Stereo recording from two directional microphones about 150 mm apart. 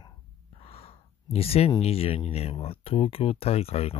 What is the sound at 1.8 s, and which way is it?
Speech, 40° left (ahead or behind).